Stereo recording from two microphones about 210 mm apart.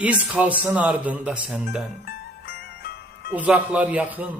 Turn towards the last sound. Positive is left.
turn(degrees=-5)  # may be behind; listen again after turning